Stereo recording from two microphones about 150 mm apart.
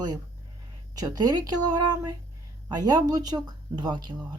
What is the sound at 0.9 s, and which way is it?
Speech, 25° right (ahead or behind).